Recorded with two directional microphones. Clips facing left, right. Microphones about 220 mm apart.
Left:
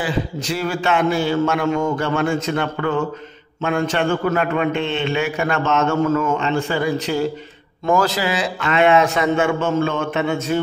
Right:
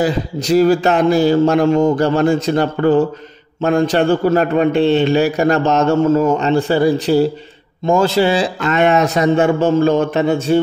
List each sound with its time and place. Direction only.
0.0 s a man's voice: 40° right (ahead or behind)